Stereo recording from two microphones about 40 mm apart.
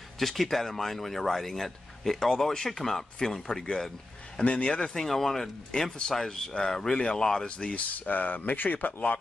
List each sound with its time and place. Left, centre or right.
0.2 s speech: centre
4.5 s speech: left
5.0 s speech: centre
7.5 s speech: left
7.9 s speech: left